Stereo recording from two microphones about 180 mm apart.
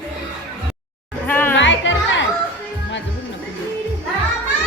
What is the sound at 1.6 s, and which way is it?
Music, 90° left.